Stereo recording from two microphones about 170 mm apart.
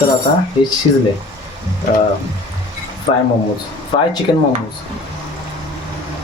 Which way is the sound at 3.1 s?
40° left (ahead or behind).